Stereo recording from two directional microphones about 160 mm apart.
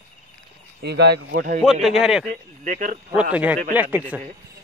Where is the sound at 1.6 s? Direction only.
Centre (ahead or behind).